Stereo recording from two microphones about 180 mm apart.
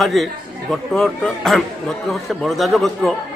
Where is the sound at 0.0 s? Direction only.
Centre (ahead or behind).